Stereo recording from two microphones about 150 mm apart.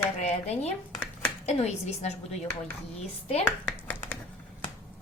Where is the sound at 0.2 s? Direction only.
45° left (ahead or behind).